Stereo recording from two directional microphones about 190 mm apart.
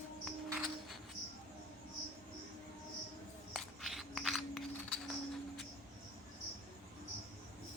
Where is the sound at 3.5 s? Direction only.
Centre (ahead or behind).